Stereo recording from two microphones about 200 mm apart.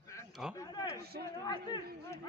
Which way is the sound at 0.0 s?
15° left (ahead or behind).